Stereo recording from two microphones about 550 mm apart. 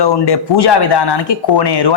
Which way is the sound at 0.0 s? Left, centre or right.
Left.